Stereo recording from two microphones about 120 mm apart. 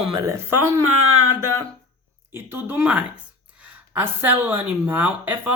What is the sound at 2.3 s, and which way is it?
A woman's voice, 20° right (ahead or behind).